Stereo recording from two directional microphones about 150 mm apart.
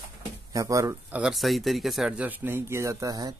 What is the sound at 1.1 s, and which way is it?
Speech, 5° right (ahead or behind).